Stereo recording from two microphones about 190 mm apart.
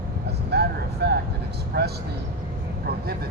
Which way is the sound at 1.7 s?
55° right (ahead or behind).